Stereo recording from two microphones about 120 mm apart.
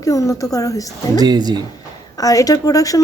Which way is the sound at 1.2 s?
35° right (ahead or behind).